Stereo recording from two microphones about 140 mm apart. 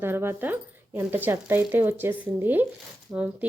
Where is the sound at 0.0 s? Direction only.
15° right (ahead or behind).